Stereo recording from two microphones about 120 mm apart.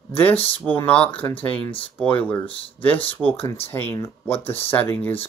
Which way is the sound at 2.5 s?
50° left (ahead or behind).